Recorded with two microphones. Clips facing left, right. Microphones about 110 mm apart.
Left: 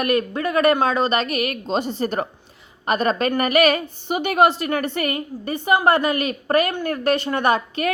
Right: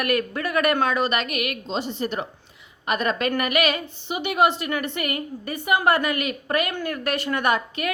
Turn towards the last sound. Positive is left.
turn(degrees=30)  # may be behind; listen again after turning